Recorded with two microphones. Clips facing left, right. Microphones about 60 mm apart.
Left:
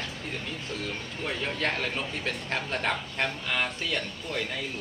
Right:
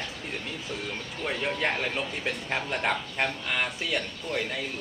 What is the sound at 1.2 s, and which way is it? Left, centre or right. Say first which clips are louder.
A man's voice: right 2 dB; centre.